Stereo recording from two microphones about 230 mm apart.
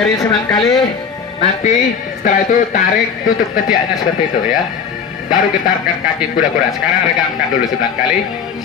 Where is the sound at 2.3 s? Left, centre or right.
Left.